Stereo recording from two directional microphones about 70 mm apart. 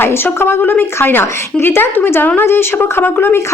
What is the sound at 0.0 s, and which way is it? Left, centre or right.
Speech, left.